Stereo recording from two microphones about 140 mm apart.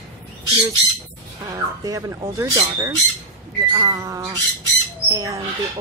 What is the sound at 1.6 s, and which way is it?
Speech, 25° right (ahead or behind).